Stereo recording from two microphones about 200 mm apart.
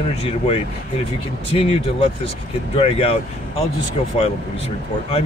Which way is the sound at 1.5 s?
30° left (ahead or behind).